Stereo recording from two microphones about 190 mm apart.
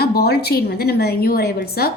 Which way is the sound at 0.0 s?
55° left (ahead or behind).